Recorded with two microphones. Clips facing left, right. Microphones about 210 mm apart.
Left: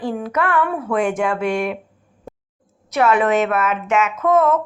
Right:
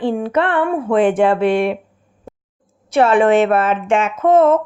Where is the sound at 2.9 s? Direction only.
30° right (ahead or behind).